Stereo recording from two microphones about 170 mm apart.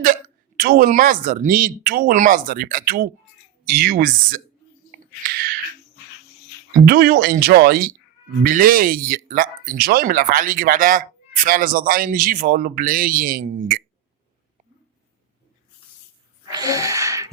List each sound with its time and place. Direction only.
0.6 s speech: 60° right (ahead or behind)
4.9 s a sound: 55° right (ahead or behind)
6.8 s speech: 65° right (ahead or behind)
16.5 s gasp: 20° right (ahead or behind)